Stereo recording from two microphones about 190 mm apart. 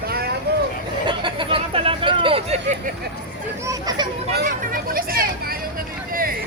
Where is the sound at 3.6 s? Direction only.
20° right (ahead or behind).